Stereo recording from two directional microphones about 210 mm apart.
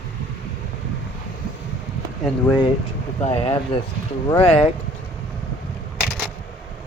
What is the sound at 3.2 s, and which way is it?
Speech, 30° left (ahead or behind).